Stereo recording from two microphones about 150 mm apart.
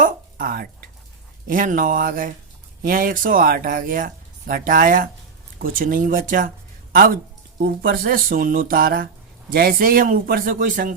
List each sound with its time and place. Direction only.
0.0 s a sound: 75° right (ahead or behind)
1.5 s speech: 65° right (ahead or behind)
6.9 s speech: 75° right (ahead or behind)
7.6 s speech: 85° right; by 10.9 s 60° right (ahead or behind)